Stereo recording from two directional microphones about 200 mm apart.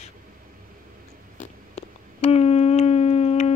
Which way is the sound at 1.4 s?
30° left (ahead or behind).